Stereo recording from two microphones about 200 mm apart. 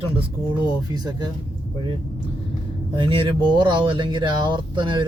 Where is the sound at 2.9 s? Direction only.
25° right (ahead or behind).